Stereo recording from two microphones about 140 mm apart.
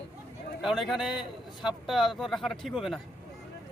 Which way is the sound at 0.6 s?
Centre (ahead or behind).